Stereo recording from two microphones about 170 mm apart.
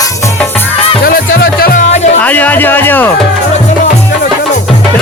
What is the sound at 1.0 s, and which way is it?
Music, 65° left (ahead or behind).